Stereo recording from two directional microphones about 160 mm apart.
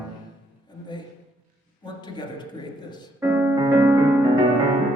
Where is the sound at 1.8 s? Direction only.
25° left (ahead or behind).